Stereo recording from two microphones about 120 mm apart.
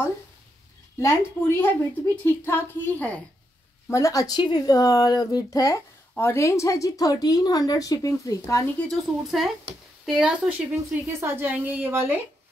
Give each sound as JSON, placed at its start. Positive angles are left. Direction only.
{"t": 0.9, "sound": "a woman's voice", "side_deg": 20}
{"t": 3.9, "sound": "speech", "side_deg": 25}
{"t": 8.6, "sound": "a woman's voice", "side_deg": 10}
{"t": 11.1, "sound": "a woman's voice", "side_deg": -20}